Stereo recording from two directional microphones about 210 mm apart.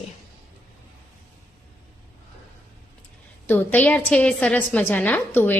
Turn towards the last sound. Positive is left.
turn(degrees=10)  # may be behind; listen again after turning